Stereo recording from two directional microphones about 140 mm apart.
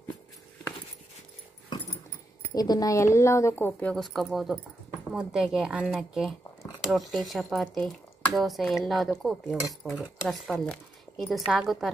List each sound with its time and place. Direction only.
2.5 s speech: 30° left (ahead or behind)
3.9 s speech: centre (ahead or behind)